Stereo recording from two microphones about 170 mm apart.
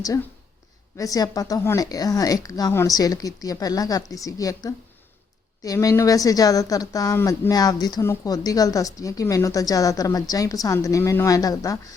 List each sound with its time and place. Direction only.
0.9 s speech: 20° left (ahead or behind)